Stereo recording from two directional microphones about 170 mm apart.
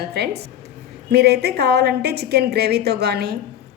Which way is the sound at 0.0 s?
70° right (ahead or behind).